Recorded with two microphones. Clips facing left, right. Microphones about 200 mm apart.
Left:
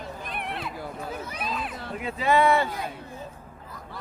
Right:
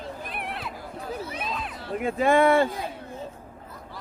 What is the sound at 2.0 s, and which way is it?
Speech, 50° right (ahead or behind).